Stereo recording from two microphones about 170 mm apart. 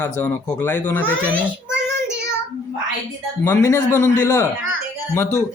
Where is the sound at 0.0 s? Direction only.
15° left (ahead or behind).